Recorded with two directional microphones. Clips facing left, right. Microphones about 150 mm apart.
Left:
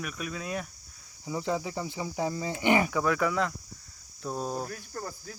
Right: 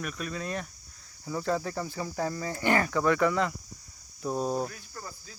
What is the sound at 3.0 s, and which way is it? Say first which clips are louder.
Speech: right 2 dB; centre (ahead or behind).